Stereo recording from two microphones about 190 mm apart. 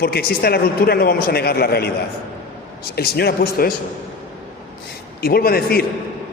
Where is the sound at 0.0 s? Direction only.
55° left (ahead or behind).